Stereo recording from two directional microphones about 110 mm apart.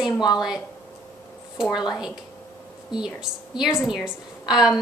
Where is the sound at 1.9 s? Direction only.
5° right (ahead or behind).